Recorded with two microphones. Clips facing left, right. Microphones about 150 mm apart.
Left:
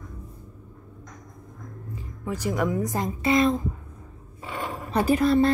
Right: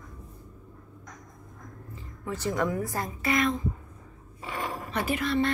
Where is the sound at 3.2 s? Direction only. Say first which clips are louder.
Left 5 dB; 30° left (ahead or behind).